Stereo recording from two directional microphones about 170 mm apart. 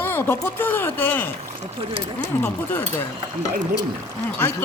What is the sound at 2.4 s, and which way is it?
Speech, 15° left (ahead or behind).